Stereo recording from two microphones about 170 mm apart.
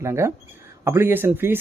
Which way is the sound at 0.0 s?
15° right (ahead or behind).